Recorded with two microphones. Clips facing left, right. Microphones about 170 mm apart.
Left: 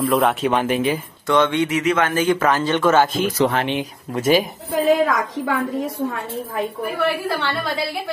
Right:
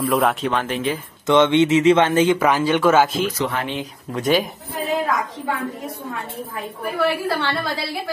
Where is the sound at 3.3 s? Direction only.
35° left (ahead or behind).